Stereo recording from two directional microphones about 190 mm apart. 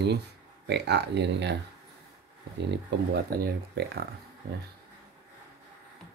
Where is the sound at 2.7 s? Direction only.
55° right (ahead or behind).